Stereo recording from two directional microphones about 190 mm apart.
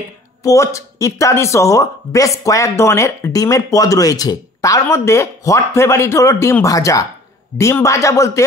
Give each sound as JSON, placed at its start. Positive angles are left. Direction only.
{"t": 0.4, "sound": "speech", "side_deg": 15}